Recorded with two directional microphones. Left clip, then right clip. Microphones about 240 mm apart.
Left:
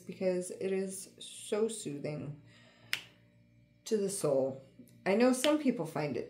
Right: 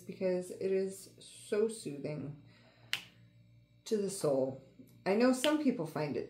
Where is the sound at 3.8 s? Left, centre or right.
Left.